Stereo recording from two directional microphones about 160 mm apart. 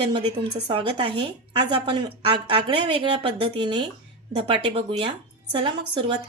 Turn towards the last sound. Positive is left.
turn(degrees=-30)  # may be behind; listen again after turning